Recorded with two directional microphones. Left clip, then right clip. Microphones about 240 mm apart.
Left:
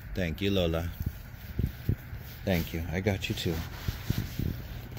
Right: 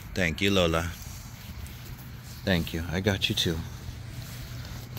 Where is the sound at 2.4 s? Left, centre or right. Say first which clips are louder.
Right 3 dB; centre.